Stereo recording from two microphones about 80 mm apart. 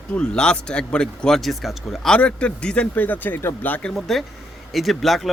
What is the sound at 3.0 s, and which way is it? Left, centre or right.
Speech, left.